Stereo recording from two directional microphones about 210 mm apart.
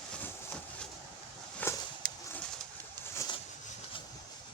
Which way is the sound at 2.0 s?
45° right (ahead or behind).